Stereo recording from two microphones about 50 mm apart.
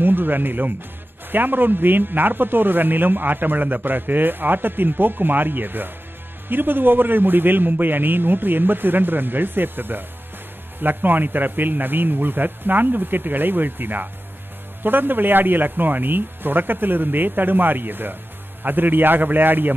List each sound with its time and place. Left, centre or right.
0.0 s a man's voice: right